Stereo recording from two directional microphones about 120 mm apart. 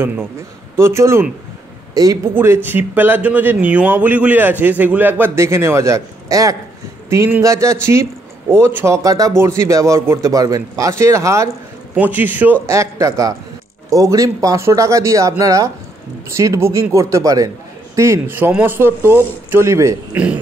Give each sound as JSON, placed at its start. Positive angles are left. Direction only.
{"t": 0.7, "sound": "speech", "side_deg": -20}
{"t": 2.3, "sound": "speech", "side_deg": -20}
{"t": 11.9, "sound": "speech", "side_deg": -15}